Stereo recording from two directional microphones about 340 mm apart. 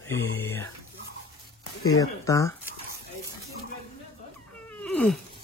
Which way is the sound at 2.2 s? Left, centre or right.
Centre.